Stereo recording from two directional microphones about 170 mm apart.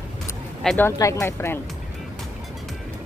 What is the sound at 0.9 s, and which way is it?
Speech, 20° left (ahead or behind).